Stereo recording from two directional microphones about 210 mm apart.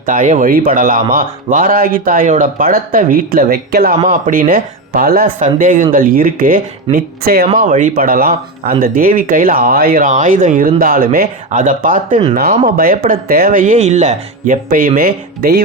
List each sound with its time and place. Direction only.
0.0 s speech: 40° right (ahead or behind)